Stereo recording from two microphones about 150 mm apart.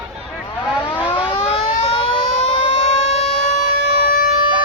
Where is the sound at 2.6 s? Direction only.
40° left (ahead or behind).